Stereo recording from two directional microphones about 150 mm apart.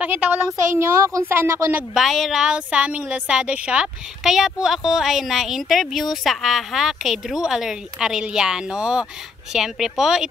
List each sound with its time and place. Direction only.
0.0 s speech: 10° right (ahead or behind)
2.0 s a woman's voice: centre (ahead or behind)